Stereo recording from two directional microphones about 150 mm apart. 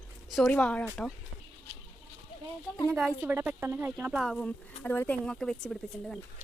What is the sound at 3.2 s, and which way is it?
Speech, 15° right (ahead or behind).